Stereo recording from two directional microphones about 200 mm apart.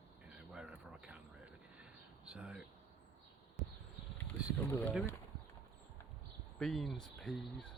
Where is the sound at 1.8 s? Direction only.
5° right (ahead or behind).